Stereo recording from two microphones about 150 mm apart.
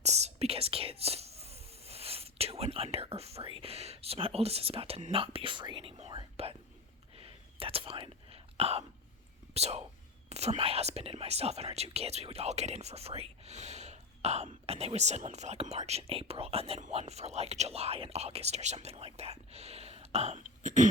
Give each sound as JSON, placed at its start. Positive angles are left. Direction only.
{"t": 0.0, "sound": "whispering", "side_deg": -45}
{"t": 9.6, "sound": "speech", "side_deg": -45}